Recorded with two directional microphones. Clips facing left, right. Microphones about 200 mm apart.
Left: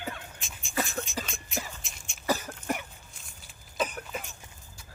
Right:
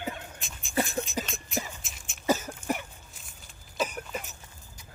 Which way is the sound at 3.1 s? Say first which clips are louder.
Right 1 dB; centre (ahead or behind).